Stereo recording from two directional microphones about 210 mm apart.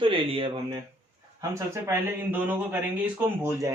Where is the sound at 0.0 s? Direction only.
25° right (ahead or behind).